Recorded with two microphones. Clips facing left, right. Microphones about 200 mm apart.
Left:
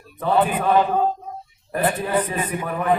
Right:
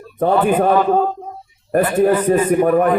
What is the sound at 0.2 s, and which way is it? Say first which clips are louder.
A man's voice: right 6 dB; 45° right (ahead or behind).